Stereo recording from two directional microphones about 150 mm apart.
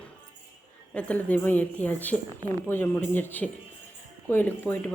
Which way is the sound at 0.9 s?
10° left (ahead or behind).